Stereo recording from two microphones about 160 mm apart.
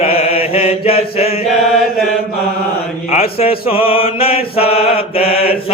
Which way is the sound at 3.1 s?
40° left (ahead or behind).